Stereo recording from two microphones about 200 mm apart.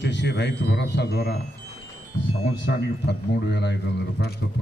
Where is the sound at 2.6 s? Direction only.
60° left (ahead or behind).